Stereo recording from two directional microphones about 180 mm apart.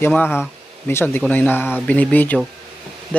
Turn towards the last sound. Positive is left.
turn(degrees=5)  # may be behind; listen again after turning